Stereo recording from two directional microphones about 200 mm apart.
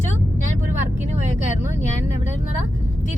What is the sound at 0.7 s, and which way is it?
Vehicle, 35° right (ahead or behind).